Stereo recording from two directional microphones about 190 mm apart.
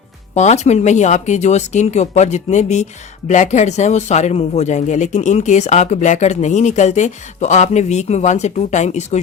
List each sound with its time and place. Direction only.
0.3 s speech: 35° left (ahead or behind)